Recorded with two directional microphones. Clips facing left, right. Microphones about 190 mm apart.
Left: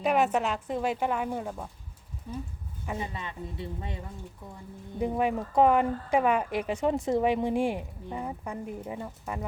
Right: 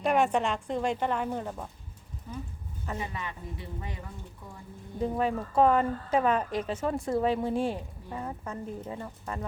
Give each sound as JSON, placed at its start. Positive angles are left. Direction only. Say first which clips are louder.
{"t": 0.0, "sound": "speech", "louder": "even", "side_deg": 5}
{"t": 3.0, "sound": "speech", "louder": "left 1 dB", "side_deg": 25}
{"t": 4.9, "sound": "speech", "louder": "left 1 dB", "side_deg": 15}